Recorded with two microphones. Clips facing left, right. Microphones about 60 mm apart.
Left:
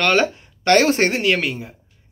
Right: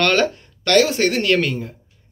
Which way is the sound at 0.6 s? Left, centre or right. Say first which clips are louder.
Left 1 dB; left.